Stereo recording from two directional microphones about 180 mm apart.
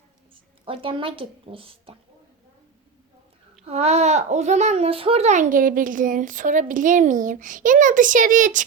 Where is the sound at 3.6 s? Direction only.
35° right (ahead or behind).